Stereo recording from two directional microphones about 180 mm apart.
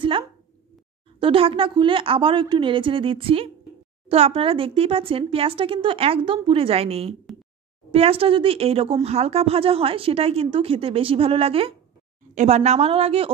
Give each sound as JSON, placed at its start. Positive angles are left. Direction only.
{"t": 1.2, "sound": "a woman's voice", "side_deg": -30}